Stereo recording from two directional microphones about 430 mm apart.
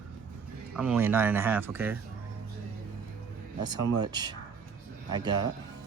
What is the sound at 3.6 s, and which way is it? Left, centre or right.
Speech, centre.